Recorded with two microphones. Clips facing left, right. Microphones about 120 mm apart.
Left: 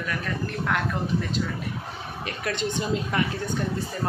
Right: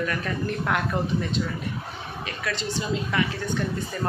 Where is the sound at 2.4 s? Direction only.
50° left (ahead or behind).